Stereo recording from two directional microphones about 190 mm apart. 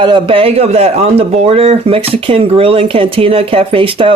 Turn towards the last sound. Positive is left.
turn(degrees=-25)  # may be behind; listen again after turning